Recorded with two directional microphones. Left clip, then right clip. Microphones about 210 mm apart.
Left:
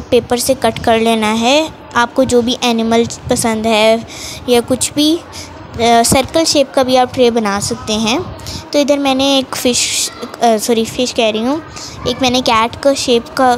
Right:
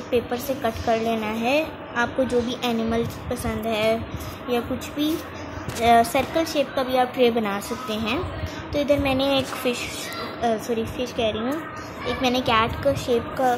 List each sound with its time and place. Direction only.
0.1 s a woman's voice: 55° left (ahead or behind)